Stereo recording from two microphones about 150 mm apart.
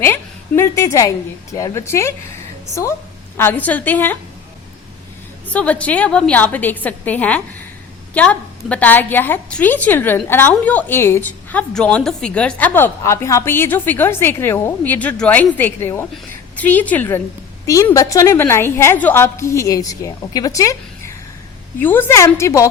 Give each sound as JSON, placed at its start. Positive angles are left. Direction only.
{"t": 0.0, "sound": "a woman's voice", "side_deg": 15}
{"t": 3.3, "sound": "a woman's voice", "side_deg": 15}
{"t": 5.5, "sound": "a woman's voice", "side_deg": 10}